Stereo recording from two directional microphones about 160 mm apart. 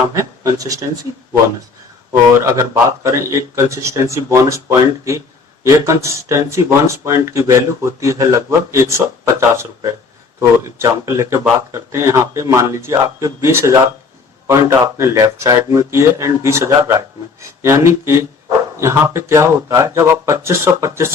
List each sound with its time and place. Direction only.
0.2 s speech: 20° right (ahead or behind)
2.4 s speech: 20° right (ahead or behind)